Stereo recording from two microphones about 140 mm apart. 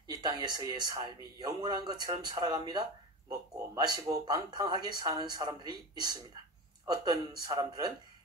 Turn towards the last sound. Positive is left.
turn(degrees=-25)  # may be behind; listen again after turning